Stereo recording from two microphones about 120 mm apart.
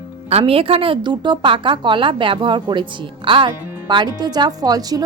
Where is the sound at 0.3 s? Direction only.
55° right (ahead or behind).